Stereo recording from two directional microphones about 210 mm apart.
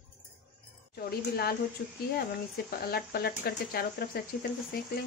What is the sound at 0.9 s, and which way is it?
A woman's voice, 50° left (ahead or behind).